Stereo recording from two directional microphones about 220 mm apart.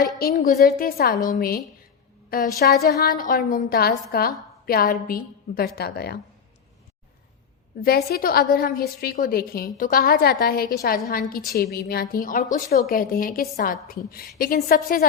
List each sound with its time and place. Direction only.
0.2 s a woman's voice: 40° left (ahead or behind)
7.8 s a woman's voice: 45° left (ahead or behind)